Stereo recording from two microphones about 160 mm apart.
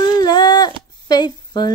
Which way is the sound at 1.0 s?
25° left (ahead or behind).